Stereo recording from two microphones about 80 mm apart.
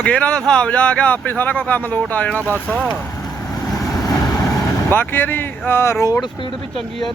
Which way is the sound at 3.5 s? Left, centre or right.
Left.